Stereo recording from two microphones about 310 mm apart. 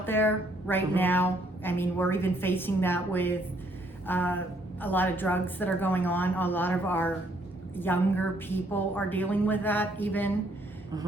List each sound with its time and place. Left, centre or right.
0.0 s a woman's voice: centre